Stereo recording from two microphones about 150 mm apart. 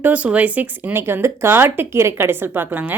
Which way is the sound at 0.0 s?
10° right (ahead or behind).